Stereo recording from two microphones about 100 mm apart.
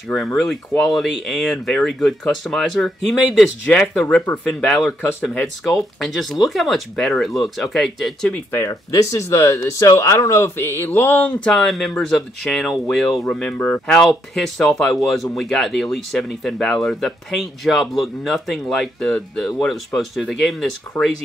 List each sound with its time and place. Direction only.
0.1 s speech: centre (ahead or behind)
3.6 s speech: 10° left (ahead or behind)
8.3 s speech: 25° left (ahead or behind)
11.4 s speech: 5° left (ahead or behind)